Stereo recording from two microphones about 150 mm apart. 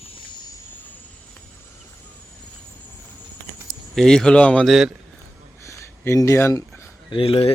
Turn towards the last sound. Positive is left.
turn(degrees=40)  # may be behind; listen again after turning